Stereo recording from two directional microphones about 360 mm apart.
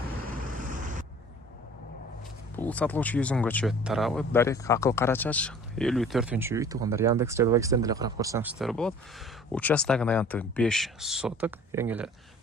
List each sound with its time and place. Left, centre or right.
0.3 s vehicle: right
2.6 s speech: centre